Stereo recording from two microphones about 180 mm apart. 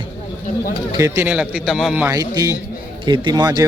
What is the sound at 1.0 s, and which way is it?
A man's voice, 10° right (ahead or behind).